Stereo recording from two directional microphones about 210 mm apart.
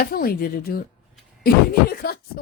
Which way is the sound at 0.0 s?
45° left (ahead or behind).